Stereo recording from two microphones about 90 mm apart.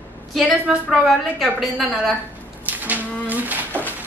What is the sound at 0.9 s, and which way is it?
A woman's voice, centre (ahead or behind).